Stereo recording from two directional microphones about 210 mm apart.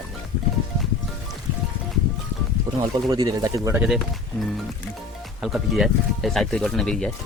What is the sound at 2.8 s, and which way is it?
Speech, 20° right (ahead or behind).